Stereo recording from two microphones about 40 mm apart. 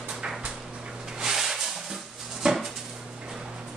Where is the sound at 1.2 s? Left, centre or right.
Centre.